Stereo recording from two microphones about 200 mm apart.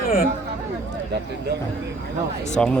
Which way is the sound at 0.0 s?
50° left (ahead or behind).